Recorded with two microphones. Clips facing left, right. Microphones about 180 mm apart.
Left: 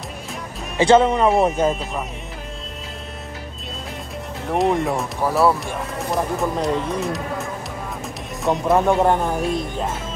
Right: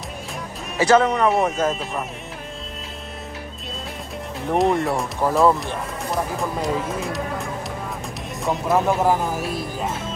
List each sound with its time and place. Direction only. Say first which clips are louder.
0.7 s speech: left 2 dB; 25° left (ahead or behind)
1.7 s speech: left 2 dB; centre (ahead or behind)
4.5 s speech: even; centre (ahead or behind)
8.5 s speech: left 3 dB; centre (ahead or behind)